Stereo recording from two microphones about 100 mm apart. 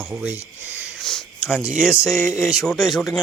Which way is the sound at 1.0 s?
5° left (ahead or behind).